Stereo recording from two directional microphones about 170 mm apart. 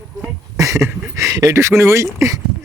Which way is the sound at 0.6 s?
20° right (ahead or behind).